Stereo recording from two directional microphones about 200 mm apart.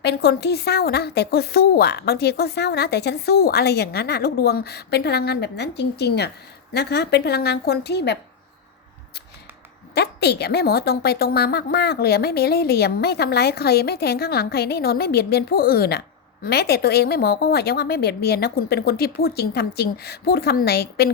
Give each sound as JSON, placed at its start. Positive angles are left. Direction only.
{"t": 0.0, "sound": "a woman's voice", "side_deg": 55}
{"t": 9.9, "sound": "a woman's voice", "side_deg": 55}